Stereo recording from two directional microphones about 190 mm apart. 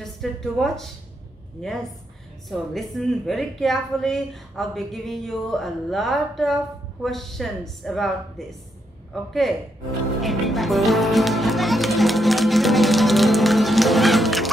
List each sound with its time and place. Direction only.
0.0 s a woman's voice: centre (ahead or behind)
10.2 s music: centre (ahead or behind)